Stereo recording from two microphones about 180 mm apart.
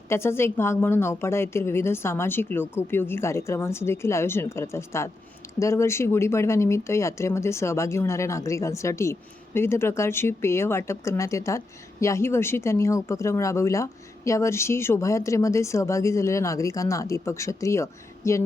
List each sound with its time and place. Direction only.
0.1 s speech: 15° left (ahead or behind)